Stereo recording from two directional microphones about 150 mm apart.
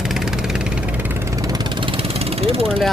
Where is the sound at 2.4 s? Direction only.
40° right (ahead or behind).